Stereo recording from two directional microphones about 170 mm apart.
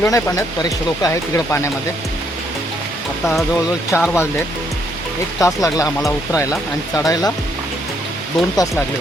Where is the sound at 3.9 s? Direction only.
15° left (ahead or behind).